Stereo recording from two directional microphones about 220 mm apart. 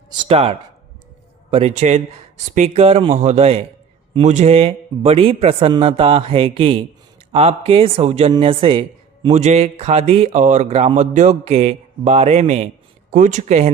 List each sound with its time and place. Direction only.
0.3 s speech: 25° right (ahead or behind)